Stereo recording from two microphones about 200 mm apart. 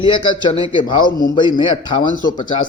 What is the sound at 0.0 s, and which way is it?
Speech, 25° left (ahead or behind).